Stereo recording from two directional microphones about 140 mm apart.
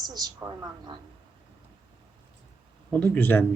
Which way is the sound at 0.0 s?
30° right (ahead or behind).